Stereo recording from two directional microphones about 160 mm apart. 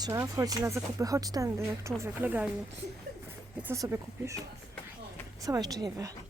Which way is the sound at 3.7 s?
20° right (ahead or behind).